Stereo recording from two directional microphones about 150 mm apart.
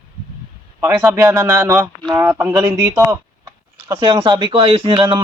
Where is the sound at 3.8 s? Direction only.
30° right (ahead or behind).